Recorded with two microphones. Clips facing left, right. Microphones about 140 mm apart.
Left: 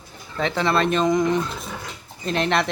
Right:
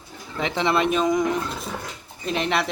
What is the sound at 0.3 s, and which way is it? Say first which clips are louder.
Speech: left 1 dB; 15° right (ahead or behind).